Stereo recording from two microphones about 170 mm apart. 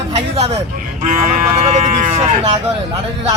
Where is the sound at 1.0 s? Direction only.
55° right (ahead or behind).